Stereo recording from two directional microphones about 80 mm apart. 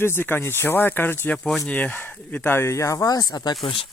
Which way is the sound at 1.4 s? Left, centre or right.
Centre.